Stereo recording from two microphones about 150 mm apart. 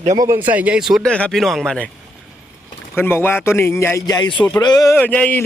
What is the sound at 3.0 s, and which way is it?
Speech, 15° left (ahead or behind).